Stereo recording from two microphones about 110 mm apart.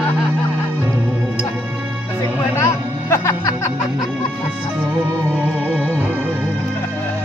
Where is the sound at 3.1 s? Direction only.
25° left (ahead or behind).